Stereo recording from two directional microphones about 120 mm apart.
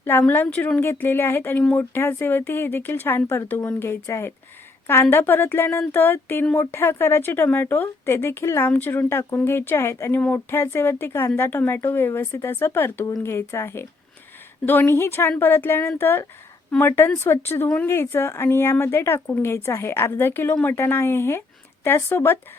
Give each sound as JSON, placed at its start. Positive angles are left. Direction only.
{"t": 0.0, "sound": "speech", "side_deg": 20}